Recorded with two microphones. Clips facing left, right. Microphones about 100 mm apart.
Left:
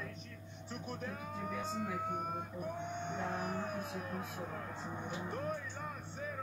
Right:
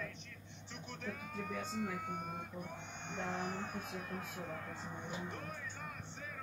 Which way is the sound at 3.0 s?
40° left (ahead or behind).